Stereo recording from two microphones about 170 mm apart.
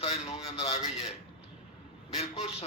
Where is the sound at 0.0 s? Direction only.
40° left (ahead or behind).